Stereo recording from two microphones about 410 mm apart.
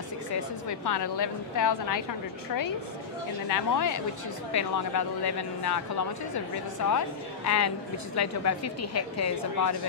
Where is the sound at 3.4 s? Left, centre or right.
Left.